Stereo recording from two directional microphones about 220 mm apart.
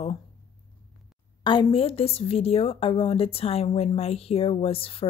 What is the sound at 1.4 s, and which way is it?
A woman's voice, 25° left (ahead or behind).